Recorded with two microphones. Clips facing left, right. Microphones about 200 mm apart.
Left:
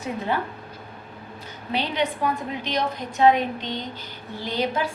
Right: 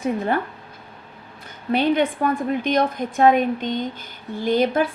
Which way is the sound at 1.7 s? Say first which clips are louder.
Right 7 dB; 50° right (ahead or behind).